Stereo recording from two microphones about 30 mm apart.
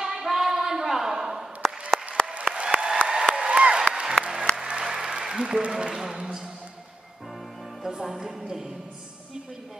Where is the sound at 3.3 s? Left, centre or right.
Right.